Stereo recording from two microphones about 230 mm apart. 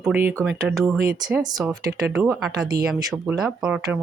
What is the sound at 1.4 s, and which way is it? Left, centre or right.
Speech, centre.